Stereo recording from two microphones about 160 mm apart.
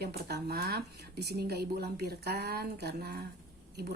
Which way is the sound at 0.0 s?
85° right.